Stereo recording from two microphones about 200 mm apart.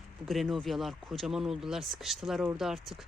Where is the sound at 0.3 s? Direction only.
Centre (ahead or behind).